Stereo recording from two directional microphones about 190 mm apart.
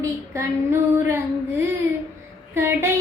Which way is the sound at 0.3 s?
15° right (ahead or behind).